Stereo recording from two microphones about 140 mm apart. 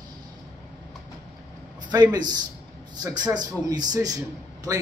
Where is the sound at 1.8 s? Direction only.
30° right (ahead or behind).